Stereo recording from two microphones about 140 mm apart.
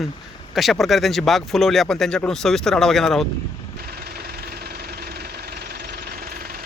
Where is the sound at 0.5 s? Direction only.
Centre (ahead or behind).